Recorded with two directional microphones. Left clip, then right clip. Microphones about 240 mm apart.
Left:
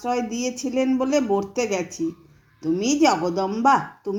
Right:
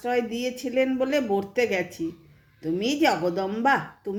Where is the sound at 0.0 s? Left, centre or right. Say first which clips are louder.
Left 1 dB; centre.